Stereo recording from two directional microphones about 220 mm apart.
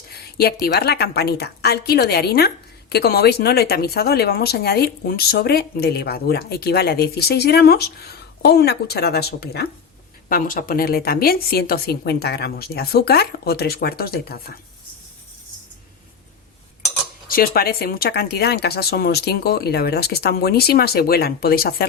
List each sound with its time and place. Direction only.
0.6 s speech: 45° left (ahead or behind)
17.2 s speech: 40° left (ahead or behind)